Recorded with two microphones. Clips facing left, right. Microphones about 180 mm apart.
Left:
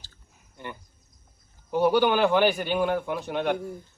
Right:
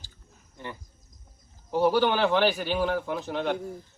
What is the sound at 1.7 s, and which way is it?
A man's voice, centre (ahead or behind).